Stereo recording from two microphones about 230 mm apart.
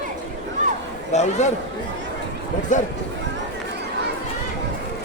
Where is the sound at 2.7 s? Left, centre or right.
Left.